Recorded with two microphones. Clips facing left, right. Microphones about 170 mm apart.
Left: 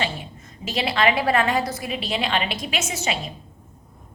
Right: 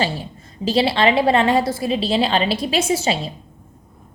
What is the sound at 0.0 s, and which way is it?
A woman's voice, 30° right (ahead or behind).